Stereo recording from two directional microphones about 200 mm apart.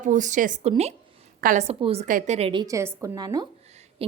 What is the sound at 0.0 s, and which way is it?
A woman's voice, 40° right (ahead or behind).